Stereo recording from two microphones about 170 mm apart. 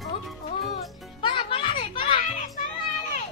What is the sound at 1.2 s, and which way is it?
Children playing, 30° left (ahead or behind).